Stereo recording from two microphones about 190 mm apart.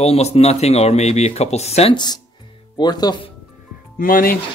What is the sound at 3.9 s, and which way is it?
Speech, 50° left (ahead or behind).